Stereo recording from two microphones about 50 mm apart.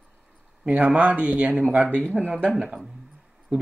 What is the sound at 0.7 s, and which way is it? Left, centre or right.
Speech, right.